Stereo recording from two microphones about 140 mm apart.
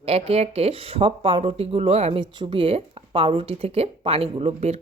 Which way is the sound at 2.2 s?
35° right (ahead or behind).